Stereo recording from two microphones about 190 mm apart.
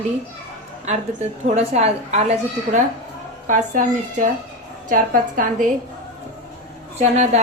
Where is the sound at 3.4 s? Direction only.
45° right (ahead or behind).